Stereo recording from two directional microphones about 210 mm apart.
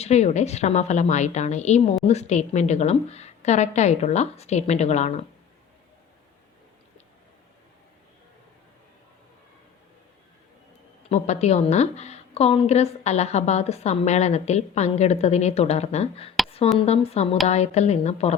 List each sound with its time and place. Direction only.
0.0 s a woman's voice: 30° left (ahead or behind)
11.1 s a woman's voice: 30° left (ahead or behind)